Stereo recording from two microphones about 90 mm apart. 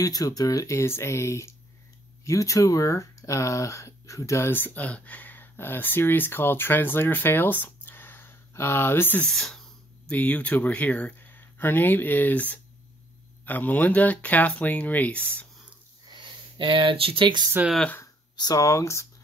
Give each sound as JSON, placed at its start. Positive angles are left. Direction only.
{"t": 0.0, "sound": "speech", "side_deg": 45}
{"t": 9.2, "sound": "speech", "side_deg": 5}
{"t": 16.1, "sound": "a sound", "side_deg": -70}
{"t": 17.6, "sound": "speech", "side_deg": -20}
{"t": 18.3, "sound": "speech", "side_deg": 45}